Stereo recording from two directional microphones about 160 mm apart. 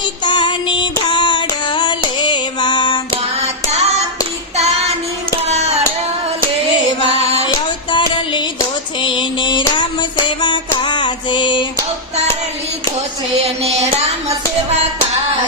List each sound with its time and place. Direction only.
0.3 s child singing: 30° left (ahead or behind)
3.4 s music: 40° right (ahead or behind)
4.5 s child singing: 40° right (ahead or behind)
7.0 s a sound: 40° right (ahead or behind)
7.9 s music: 30° left (ahead or behind)
13.3 s music: 40° right (ahead or behind)